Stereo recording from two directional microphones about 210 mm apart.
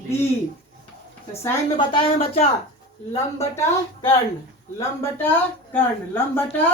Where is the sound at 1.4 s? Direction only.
20° left (ahead or behind).